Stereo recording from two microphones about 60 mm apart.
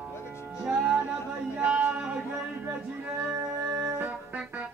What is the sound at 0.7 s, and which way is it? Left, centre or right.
Music, centre.